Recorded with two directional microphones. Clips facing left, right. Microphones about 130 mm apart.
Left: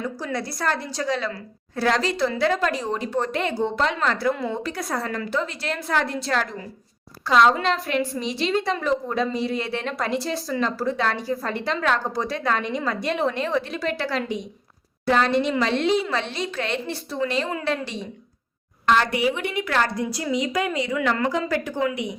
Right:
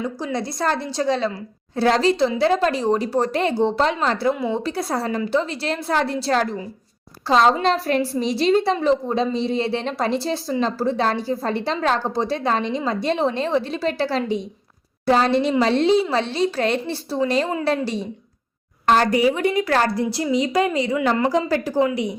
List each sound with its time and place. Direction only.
0.0 s a woman's voice: 20° right (ahead or behind)